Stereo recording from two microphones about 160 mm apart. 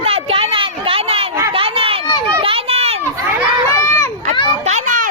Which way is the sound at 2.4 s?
35° right (ahead or behind).